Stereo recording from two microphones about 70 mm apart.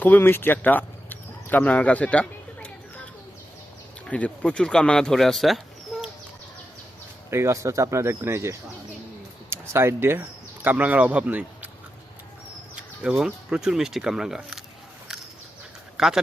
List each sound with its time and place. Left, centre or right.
0.0 s a sound: left
4.0 s speech: centre
7.3 s speech: right
10.2 s speech: right
13.1 s speech: centre
16.0 s speech: centre